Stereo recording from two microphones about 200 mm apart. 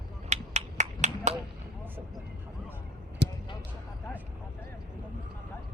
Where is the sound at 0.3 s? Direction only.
35° right (ahead or behind).